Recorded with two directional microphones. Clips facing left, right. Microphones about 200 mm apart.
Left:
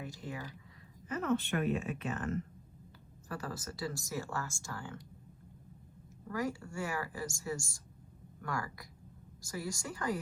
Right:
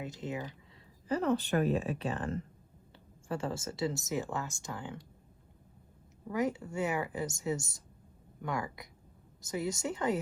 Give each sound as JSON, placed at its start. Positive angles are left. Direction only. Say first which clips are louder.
{"t": 0.0, "sound": "speech", "louder": "right 5 dB", "side_deg": -20}
{"t": 1.0, "sound": "a woman's voice", "louder": "right 3 dB", "side_deg": -35}
{"t": 6.2, "sound": "speech", "louder": "right 4 dB", "side_deg": -20}